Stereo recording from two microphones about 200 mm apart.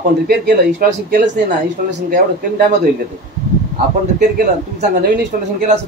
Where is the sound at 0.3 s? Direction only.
45° right (ahead or behind).